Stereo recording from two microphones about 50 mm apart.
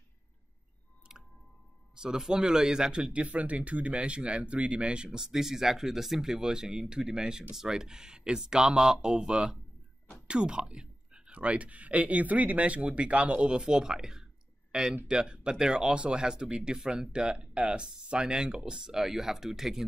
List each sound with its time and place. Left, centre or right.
2.0 s a man's voice: centre